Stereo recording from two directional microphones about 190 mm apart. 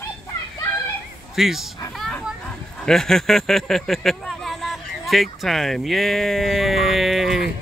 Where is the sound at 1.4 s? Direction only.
Centre (ahead or behind).